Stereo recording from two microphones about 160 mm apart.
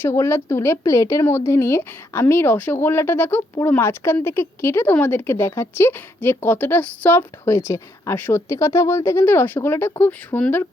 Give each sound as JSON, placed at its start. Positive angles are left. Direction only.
{"t": 0.0, "sound": "speech", "side_deg": 15}